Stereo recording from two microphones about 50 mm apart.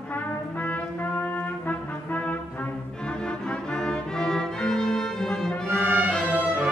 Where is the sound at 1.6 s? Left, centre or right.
Left.